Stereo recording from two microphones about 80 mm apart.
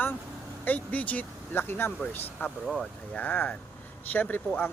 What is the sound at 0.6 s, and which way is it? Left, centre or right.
Speech, centre.